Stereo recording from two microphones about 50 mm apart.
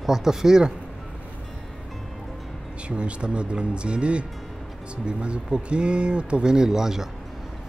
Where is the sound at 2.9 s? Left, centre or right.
Right.